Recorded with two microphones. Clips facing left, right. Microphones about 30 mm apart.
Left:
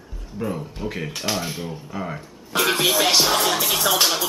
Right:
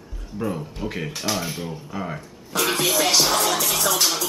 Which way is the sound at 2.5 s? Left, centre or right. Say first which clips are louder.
Left 2 dB; centre.